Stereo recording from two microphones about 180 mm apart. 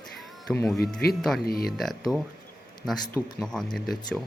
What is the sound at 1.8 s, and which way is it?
Speech, centre (ahead or behind).